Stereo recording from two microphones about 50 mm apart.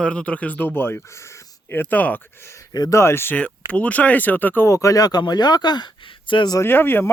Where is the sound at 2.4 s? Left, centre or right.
Left.